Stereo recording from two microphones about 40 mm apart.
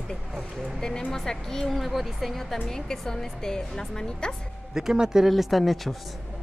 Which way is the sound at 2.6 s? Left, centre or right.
Centre.